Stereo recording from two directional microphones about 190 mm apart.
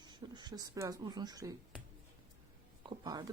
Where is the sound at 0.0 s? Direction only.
25° right (ahead or behind).